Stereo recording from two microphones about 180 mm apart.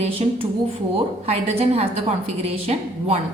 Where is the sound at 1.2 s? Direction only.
35° right (ahead or behind).